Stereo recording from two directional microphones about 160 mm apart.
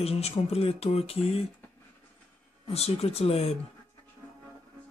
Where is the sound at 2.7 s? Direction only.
40° left (ahead or behind).